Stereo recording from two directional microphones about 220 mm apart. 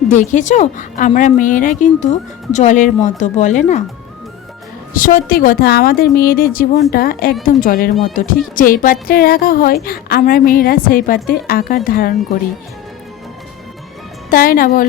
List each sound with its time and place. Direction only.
0.1 s a woman's voice: 35° left (ahead or behind)
4.9 s a woman's voice: 40° left (ahead or behind)
14.3 s a woman's voice: 40° left (ahead or behind)